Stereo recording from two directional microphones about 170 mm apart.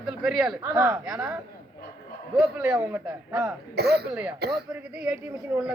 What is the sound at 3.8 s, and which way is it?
Speech, 70° right (ahead or behind).